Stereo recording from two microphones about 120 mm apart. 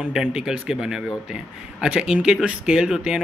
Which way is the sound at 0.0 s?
5° right (ahead or behind).